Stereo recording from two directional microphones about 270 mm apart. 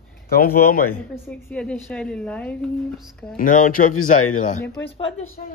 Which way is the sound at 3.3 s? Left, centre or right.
Left.